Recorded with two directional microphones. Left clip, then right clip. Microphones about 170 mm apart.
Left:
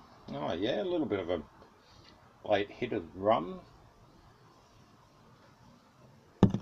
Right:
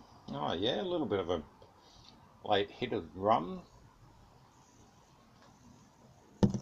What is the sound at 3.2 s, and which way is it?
Speech, 15° right (ahead or behind).